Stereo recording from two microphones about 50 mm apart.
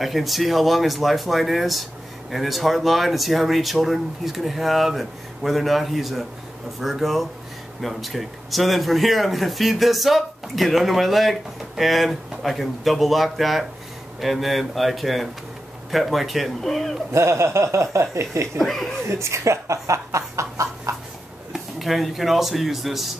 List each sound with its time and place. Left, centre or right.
0.0 s speech: centre
17.1 s speech: right
18.6 s speech: centre
19.0 s speech: right
21.7 s speech: centre